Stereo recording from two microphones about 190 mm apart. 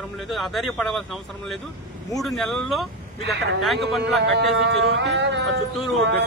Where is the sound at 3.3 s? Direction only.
60° right (ahead or behind).